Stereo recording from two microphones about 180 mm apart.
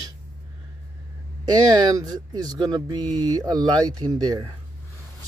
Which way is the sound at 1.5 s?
20° right (ahead or behind).